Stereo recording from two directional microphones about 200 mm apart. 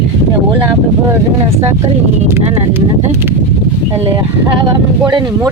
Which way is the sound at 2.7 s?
10° right (ahead or behind).